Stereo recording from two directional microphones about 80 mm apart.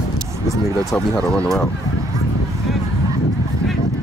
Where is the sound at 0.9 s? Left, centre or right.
Centre.